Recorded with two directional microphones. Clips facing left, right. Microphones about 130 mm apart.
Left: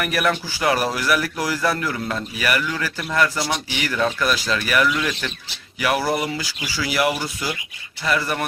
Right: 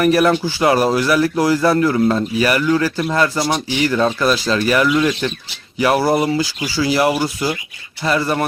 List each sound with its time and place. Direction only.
0.0 s speech: 30° right (ahead or behind)